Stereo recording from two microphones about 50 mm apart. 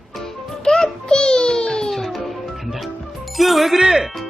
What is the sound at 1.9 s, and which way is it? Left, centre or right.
Music, centre.